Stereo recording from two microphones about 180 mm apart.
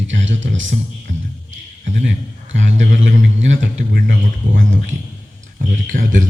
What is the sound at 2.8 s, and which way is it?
Speech, 90° right.